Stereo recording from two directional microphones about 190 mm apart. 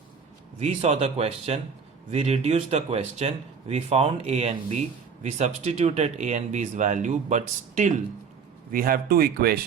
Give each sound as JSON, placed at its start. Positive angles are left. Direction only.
{"t": 0.6, "sound": "speech", "side_deg": -35}
{"t": 8.7, "sound": "speech", "side_deg": -50}